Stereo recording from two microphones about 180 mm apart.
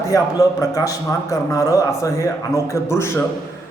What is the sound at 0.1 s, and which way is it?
A man's voice, 20° left (ahead or behind).